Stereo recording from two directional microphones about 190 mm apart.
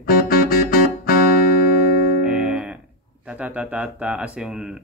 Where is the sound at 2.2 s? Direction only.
5° right (ahead or behind).